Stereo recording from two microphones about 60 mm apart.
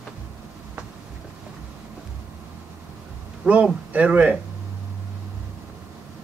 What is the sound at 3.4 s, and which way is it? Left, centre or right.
A man's voice, centre.